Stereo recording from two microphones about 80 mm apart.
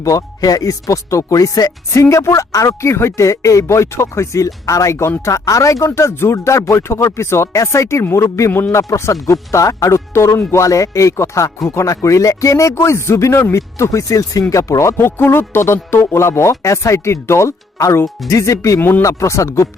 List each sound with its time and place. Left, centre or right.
0.0 s speech: left
18.8 s speech: left
19.0 s speech: left